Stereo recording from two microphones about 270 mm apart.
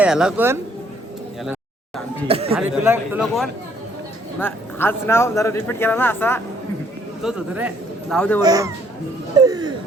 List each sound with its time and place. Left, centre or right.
0.0 s speech: centre
2.2 s speech: right
2.6 s speech: centre
7.2 s speech: centre
8.1 s speech: centre
8.4 s speech: centre